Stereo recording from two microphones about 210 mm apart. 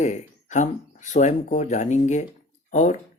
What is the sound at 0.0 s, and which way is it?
Speech, 35° left (ahead or behind).